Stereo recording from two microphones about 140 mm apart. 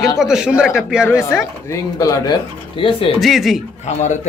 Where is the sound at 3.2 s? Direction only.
Centre (ahead or behind).